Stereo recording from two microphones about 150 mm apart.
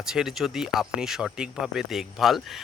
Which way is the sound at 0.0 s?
5° right (ahead or behind).